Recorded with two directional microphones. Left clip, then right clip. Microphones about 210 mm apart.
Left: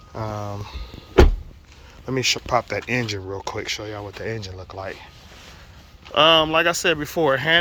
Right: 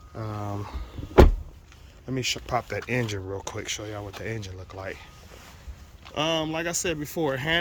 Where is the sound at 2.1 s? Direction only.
5° right (ahead or behind).